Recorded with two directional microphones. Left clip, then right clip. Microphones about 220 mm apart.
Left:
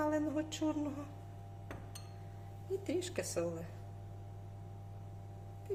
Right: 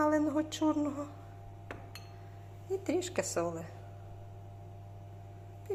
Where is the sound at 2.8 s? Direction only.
10° right (ahead or behind).